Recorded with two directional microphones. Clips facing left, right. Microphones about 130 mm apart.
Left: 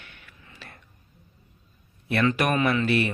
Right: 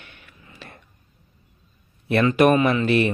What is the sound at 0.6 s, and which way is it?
Whispering, 15° right (ahead or behind).